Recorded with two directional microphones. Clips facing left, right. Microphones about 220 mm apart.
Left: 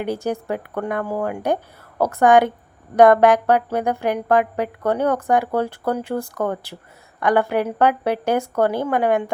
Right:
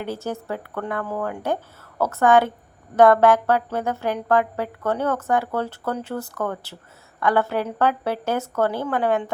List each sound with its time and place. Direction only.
0.0 s a woman's voice: 15° left (ahead or behind)